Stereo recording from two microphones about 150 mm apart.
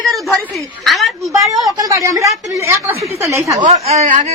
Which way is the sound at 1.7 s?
25° right (ahead or behind).